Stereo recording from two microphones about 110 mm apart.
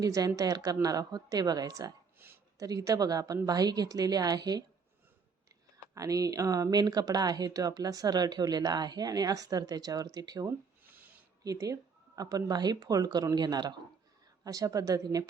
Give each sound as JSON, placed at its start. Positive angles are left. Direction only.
{"t": 0.0, "sound": "speech", "side_deg": -30}
{"t": 2.1, "sound": "a sound", "side_deg": -20}
{"t": 2.6, "sound": "speech", "side_deg": -35}
{"t": 5.7, "sound": "speech", "side_deg": -30}